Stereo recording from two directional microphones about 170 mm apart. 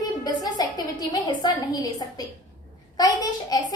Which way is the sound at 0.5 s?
20° left (ahead or behind).